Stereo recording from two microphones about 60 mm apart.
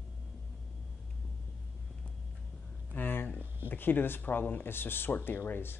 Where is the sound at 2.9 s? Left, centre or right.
Left.